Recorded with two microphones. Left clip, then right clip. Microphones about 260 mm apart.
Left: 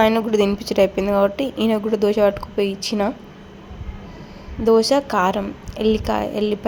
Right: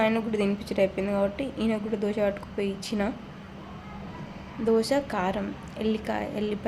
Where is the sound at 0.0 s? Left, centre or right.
Centre.